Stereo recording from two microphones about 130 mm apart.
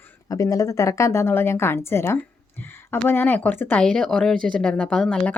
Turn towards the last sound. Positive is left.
turn(degrees=5)  # may be behind; listen again after turning